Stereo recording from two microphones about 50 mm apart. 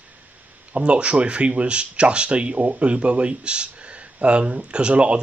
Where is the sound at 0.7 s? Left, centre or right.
Right.